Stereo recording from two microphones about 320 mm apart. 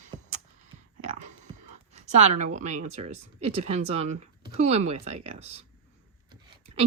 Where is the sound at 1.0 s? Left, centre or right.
Right.